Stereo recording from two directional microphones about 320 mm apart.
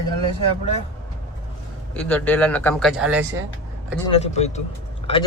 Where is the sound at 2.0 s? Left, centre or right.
Centre.